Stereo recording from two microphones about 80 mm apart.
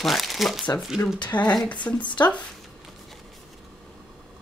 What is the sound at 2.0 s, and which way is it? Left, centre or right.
Speech, left.